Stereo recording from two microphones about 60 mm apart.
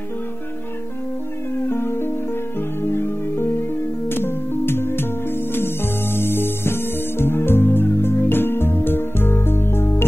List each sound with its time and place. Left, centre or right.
1.6 s music: left